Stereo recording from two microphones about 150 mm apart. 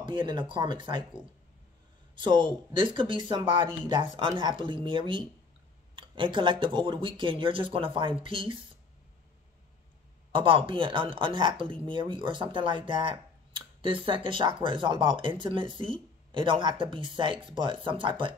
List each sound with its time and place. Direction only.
0.0 s speech: 30° right (ahead or behind)
2.1 s speech: 30° right (ahead or behind)
10.3 s speech: 35° right (ahead or behind)